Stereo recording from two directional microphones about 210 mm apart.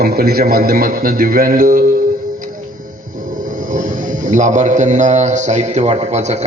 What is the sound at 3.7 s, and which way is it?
A man's voice, 40° right (ahead or behind).